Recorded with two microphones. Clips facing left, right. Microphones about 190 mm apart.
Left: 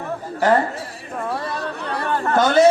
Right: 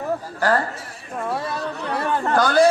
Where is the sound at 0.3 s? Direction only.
20° left (ahead or behind).